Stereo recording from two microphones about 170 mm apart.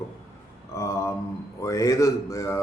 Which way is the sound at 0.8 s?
15° left (ahead or behind).